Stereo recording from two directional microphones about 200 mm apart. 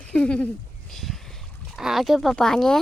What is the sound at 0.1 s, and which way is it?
Speech, 5° left (ahead or behind).